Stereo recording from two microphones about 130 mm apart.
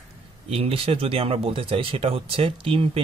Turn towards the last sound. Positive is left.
turn(degrees=-45)  # may be behind; listen again after turning